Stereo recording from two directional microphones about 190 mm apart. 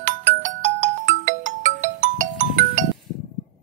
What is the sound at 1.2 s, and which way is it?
Music, 40° right (ahead or behind).